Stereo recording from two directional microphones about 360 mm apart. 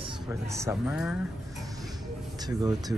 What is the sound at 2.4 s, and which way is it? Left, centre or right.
Speech, centre.